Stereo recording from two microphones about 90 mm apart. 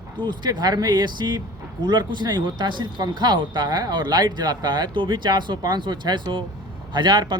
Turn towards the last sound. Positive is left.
turn(degrees=-55)  # may be behind; listen again after turning